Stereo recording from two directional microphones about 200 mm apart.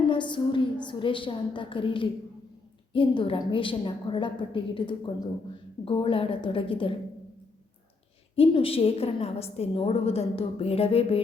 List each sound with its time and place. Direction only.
0.1 s a woman's voice: 25° left (ahead or behind)
8.4 s a woman's voice: 30° left (ahead or behind)